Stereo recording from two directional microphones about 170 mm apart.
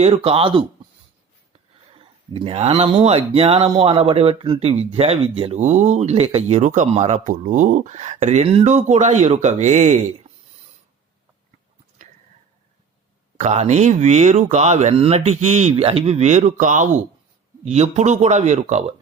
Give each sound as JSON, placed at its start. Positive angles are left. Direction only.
{"t": 0.0, "sound": "speech", "side_deg": -35}
{"t": 1.9, "sound": "speech", "side_deg": -35}
{"t": 13.3, "sound": "speech", "side_deg": -40}